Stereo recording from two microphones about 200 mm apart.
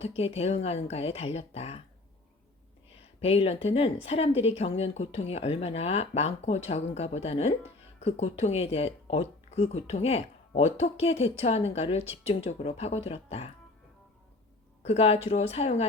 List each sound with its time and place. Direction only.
0.2 s speech: 30° left (ahead or behind)
3.2 s speech: 30° left (ahead or behind)
14.8 s speech: 30° left (ahead or behind)